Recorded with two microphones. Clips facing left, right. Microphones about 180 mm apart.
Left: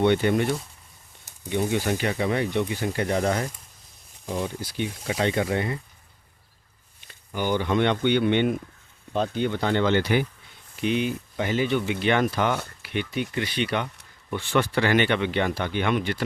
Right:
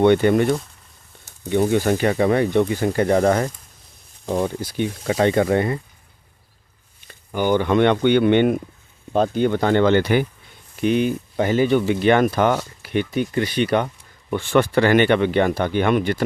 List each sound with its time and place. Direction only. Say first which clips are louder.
0.0 s speech: right 6 dB; 50° right (ahead or behind)
7.1 s speech: right 6 dB; 55° right (ahead or behind)